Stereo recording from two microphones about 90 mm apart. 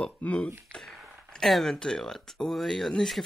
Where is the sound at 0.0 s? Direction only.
10° left (ahead or behind).